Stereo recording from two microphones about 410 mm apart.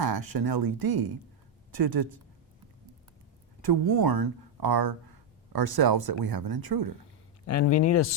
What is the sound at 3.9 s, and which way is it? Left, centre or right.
Speech, right.